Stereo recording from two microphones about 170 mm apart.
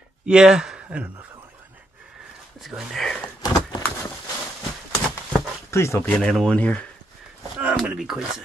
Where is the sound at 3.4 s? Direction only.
20° left (ahead or behind).